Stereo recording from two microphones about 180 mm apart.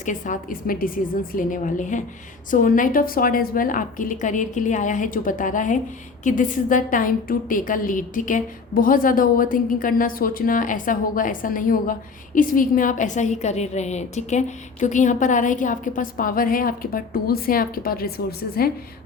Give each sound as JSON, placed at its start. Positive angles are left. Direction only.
{"t": 0.0, "sound": "a woman's voice", "side_deg": 45}